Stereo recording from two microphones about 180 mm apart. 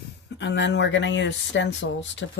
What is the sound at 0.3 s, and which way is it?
Speech, 75° left (ahead or behind).